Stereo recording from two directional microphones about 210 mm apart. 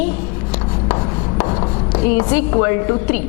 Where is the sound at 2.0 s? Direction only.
15° left (ahead or behind).